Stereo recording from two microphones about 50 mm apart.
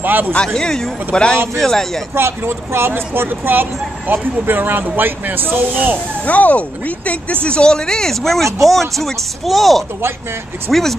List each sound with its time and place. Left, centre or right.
0.0 s speech: right
0.5 s speech: centre
1.6 s speech: centre
2.1 s speech: right
3.2 s speech: right
6.2 s speech: left
7.4 s speech: centre